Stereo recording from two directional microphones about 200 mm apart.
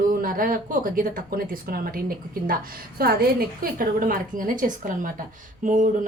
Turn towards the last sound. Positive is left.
turn(degrees=-40)  # may be behind; listen again after turning